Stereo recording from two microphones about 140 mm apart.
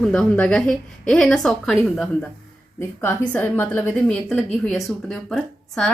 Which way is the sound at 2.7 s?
15° left (ahead or behind).